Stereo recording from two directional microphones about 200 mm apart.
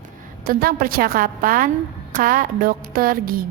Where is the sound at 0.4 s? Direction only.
45° right (ahead or behind).